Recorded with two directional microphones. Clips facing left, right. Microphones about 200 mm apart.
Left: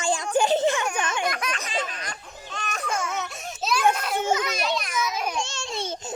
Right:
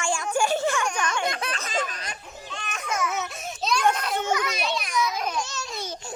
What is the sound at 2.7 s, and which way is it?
Baby cry, 35° left (ahead or behind).